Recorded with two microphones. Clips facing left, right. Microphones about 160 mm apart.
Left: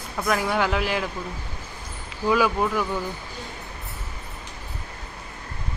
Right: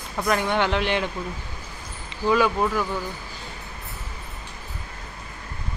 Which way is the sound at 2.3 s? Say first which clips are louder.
Right 1 dB; 5° left (ahead or behind).